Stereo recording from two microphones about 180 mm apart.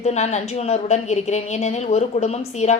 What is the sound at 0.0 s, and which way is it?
A woman's voice, 40° left (ahead or behind).